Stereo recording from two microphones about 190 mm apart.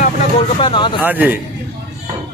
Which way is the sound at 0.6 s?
25° left (ahead or behind).